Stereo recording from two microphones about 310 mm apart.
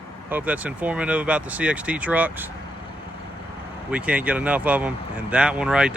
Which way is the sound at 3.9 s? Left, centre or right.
Centre.